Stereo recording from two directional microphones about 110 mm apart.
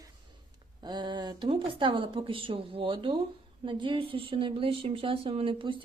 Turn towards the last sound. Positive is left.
turn(degrees=-50)  # may be behind; listen again after turning